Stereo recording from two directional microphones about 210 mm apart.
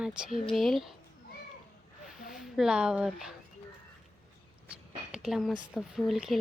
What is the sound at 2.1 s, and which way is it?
Speech, centre (ahead or behind).